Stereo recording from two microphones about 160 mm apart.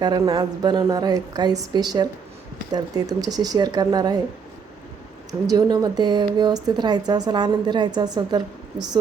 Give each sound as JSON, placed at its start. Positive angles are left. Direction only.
{"t": 0.0, "sound": "a woman's voice", "side_deg": -25}
{"t": 5.5, "sound": "a woman's voice", "side_deg": -25}